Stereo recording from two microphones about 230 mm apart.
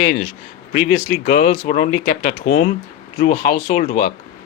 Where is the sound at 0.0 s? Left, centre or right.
Left.